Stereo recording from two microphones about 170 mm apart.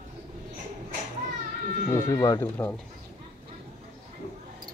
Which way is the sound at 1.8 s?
15° left (ahead or behind).